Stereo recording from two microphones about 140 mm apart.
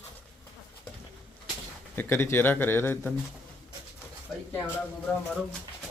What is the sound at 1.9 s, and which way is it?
Speech, 15° left (ahead or behind).